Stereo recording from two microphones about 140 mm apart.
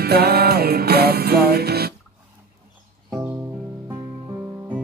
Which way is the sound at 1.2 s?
90° right.